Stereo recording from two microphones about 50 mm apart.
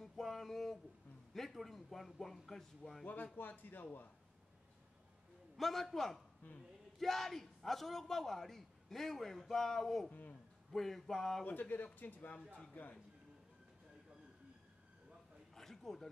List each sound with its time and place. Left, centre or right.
0.0 s a sound: centre
1.3 s a man's voice: centre
3.3 s speech: left
5.6 s a man's voice: centre
11.4 s speech: left
15.5 s a sound: centre